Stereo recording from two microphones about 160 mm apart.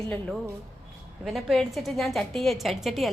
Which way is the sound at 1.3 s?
Centre (ahead or behind).